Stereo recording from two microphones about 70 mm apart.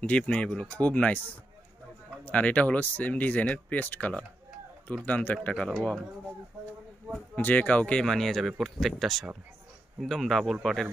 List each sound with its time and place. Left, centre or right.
0.0 s speech: centre
2.2 s speech: left
7.3 s speech: left; by 10.9 s centre